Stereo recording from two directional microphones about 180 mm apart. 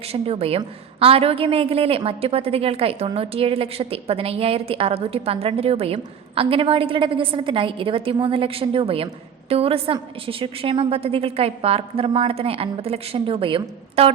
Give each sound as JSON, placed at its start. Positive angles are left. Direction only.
{"t": 0.1, "sound": "a woman's voice", "side_deg": -35}